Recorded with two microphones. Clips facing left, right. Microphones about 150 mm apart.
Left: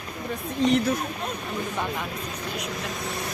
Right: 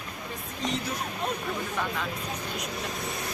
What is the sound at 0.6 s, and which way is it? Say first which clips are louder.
Speech: left 10 dB; 65° left (ahead or behind).